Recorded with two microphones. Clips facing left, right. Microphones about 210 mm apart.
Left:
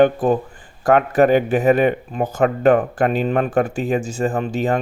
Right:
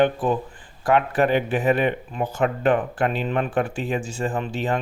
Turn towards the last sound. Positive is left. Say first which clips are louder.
# left 5 dB
turn(degrees=45)  # may be behind; listen again after turning